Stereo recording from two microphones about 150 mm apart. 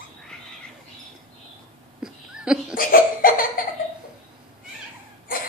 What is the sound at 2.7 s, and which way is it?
Laughter, 70° left (ahead or behind).